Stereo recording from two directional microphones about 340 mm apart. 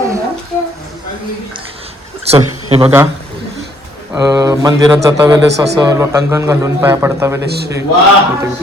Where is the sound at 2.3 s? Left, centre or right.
Centre.